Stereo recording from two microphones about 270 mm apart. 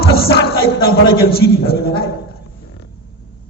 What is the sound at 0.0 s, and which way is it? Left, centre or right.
Music, left.